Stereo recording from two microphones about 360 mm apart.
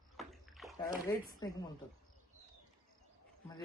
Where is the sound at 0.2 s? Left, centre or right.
Centre.